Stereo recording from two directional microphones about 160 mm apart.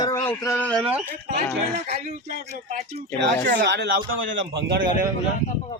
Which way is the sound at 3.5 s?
75° right (ahead or behind).